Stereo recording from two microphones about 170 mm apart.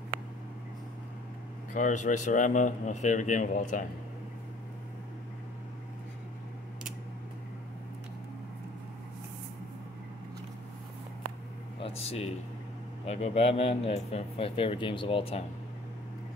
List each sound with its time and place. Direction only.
1.7 s a man's voice: 50° left (ahead or behind)
11.8 s a sound: 35° left (ahead or behind)
13.0 s speech: 40° left (ahead or behind)